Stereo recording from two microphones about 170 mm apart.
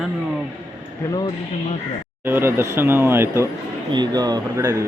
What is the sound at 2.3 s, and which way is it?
Speech, 15° right (ahead or behind).